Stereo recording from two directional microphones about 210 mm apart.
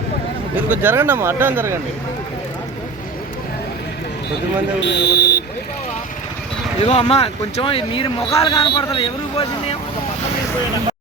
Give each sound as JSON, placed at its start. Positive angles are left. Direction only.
{"t": 0.5, "sound": "speech", "side_deg": -10}
{"t": 4.8, "sound": "a man's voice", "side_deg": 55}
{"t": 6.8, "sound": "speech", "side_deg": 30}